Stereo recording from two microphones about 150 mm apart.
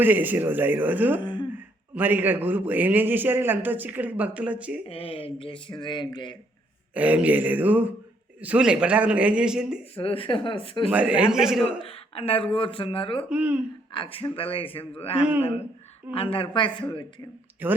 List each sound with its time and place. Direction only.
0.0 s a man's voice: 10° right (ahead or behind)
1.2 s throat clearing: 30° left (ahead or behind)
1.5 s a man's voice: 10° right (ahead or behind)
4.9 s speech: 40° left (ahead or behind)
6.9 s a man's voice: 10° right (ahead or behind)
9.9 s speech: 40° left (ahead or behind)
10.9 s a man's voice: 10° right (ahead or behind)
11.6 s speech: 40° left (ahead or behind)
13.3 s a man's voice: 10° right (ahead or behind)
13.9 s speech: 35° left (ahead or behind)
17.6 s a man's voice: 10° right (ahead or behind)